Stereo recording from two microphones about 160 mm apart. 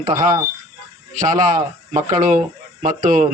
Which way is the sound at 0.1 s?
55° right (ahead or behind).